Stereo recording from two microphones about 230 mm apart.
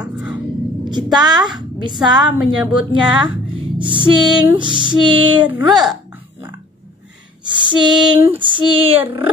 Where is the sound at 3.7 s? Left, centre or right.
Right.